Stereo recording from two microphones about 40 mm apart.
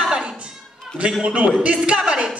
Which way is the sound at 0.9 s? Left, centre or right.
Centre.